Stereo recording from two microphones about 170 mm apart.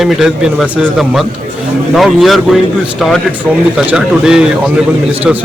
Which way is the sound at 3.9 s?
5° right (ahead or behind).